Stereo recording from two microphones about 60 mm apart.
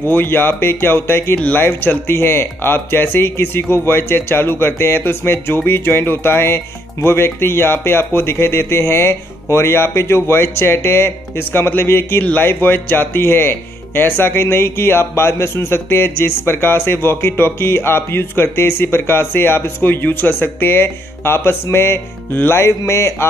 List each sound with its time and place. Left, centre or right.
0.1 s speech: left
12.2 s speech: left